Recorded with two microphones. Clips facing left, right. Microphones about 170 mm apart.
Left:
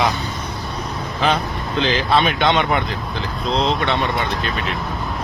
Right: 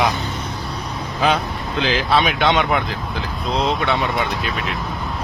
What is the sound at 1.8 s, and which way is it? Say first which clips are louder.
Speech: even; 5° right (ahead or behind).